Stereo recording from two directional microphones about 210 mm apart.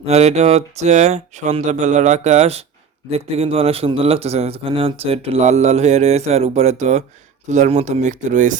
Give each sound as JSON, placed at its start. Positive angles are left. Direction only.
{"t": 0.0, "sound": "a man's voice", "side_deg": -30}